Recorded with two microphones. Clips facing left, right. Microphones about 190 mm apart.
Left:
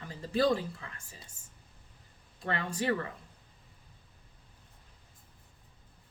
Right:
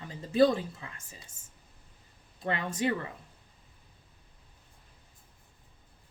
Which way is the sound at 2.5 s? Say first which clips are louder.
Right 3 dB; 20° right (ahead or behind).